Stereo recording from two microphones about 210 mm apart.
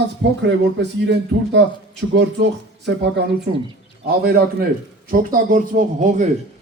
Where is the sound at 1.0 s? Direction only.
55° right (ahead or behind).